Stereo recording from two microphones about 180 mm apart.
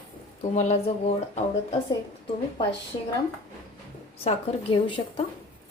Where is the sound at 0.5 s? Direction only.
40° left (ahead or behind).